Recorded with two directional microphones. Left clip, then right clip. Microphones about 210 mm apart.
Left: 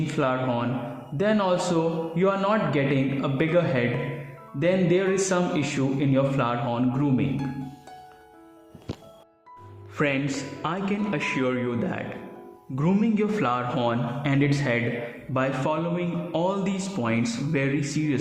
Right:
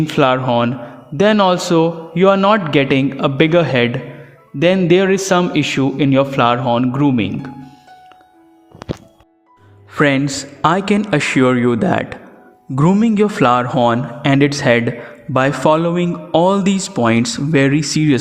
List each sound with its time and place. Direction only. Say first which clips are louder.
0.1 s a man's voice: right 11 dB; 40° right (ahead or behind)
9.9 s a man's voice: right 11 dB; 40° right (ahead or behind)